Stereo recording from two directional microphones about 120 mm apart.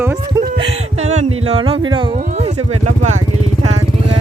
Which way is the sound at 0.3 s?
35° right (ahead or behind).